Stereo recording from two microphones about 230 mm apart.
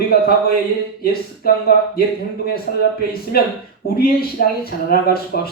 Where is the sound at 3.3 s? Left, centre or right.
Left.